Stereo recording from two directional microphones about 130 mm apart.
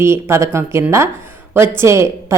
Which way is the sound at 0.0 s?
20° right (ahead or behind).